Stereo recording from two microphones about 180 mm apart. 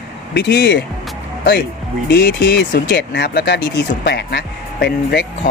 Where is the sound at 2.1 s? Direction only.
70° left (ahead or behind).